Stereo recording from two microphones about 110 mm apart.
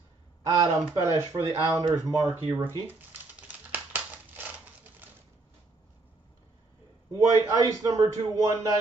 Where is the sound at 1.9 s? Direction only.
30° right (ahead or behind).